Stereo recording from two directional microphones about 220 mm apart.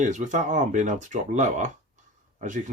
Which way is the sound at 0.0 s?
35° right (ahead or behind).